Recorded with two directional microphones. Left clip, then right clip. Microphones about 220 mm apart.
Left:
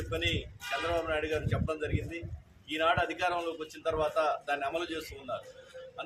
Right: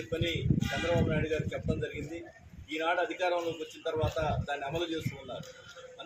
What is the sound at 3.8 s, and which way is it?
Speech, 25° left (ahead or behind).